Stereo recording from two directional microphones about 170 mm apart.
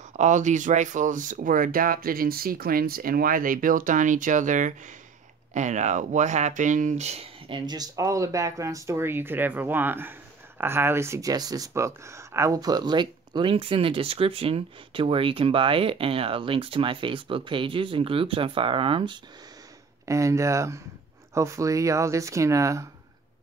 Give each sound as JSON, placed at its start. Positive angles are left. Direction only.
{"t": 0.2, "sound": "speech", "side_deg": -45}
{"t": 20.1, "sound": "speech", "side_deg": -20}